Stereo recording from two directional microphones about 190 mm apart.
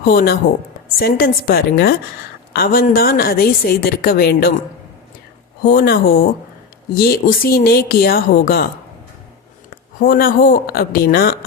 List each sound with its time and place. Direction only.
0.0 s a woman's voice: 55° left (ahead or behind)
5.6 s a woman's voice: 55° left (ahead or behind)
10.0 s a woman's voice: 50° left (ahead or behind)